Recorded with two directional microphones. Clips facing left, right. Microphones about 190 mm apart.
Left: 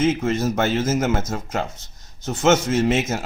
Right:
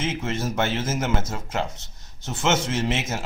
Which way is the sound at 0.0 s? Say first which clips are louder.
Left 7 dB; 40° left (ahead or behind).